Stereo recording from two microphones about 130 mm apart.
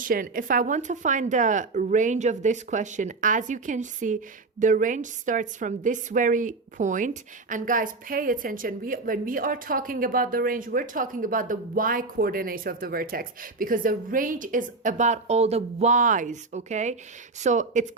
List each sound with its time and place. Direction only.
0.0 s a woman's voice: 90° right; by 17.8 s 65° right (ahead or behind)